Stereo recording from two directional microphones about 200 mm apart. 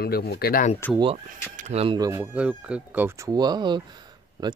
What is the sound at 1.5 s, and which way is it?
Speech, 35° right (ahead or behind).